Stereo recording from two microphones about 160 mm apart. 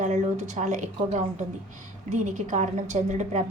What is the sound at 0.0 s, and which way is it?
Speech, 45° right (ahead or behind).